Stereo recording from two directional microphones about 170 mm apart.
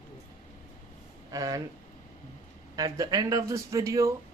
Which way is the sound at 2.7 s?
20° right (ahead or behind).